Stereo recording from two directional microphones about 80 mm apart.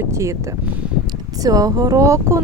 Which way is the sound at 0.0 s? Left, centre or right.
Right.